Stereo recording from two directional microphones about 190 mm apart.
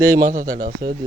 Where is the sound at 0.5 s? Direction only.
50° right (ahead or behind).